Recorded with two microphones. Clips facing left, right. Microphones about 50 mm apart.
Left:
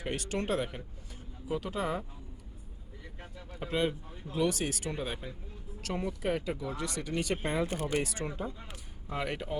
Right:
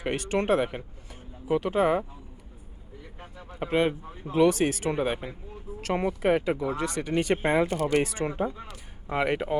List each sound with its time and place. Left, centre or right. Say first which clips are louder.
0.0 s speech: right 7 dB; right
3.2 s a sound: right 3 dB; right
3.6 s speech: right 6 dB; right
4.1 s speech: right 9 dB; right
4.9 s speech: right 9 dB; right